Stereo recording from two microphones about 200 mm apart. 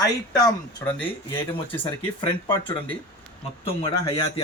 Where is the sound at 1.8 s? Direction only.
25° left (ahead or behind).